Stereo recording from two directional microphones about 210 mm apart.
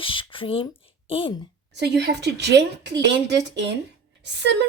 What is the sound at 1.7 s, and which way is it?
A woman's voice, 55° right (ahead or behind).